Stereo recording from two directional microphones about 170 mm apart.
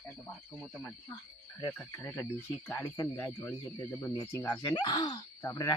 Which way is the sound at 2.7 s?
25° left (ahead or behind).